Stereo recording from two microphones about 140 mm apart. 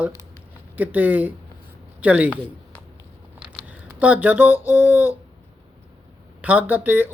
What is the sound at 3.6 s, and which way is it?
Speech, 10° right (ahead or behind).